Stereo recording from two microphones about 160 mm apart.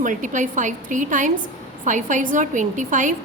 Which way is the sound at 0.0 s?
55° right (ahead or behind).